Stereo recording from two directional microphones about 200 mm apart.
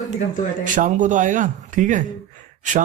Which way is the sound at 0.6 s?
40° right (ahead or behind).